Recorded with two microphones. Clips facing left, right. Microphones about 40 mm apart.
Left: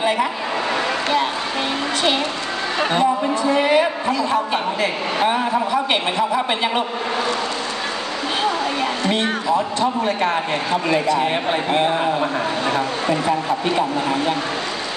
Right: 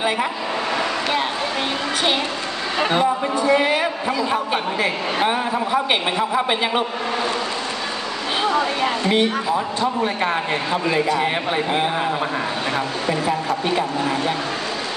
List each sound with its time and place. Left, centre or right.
2.8 s a man's voice: centre
5.7 s a man's voice: centre
8.5 s a woman's voice: right
11.1 s a man's voice: centre